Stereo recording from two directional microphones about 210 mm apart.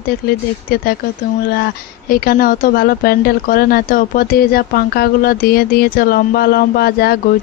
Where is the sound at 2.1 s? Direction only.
45° left (ahead or behind).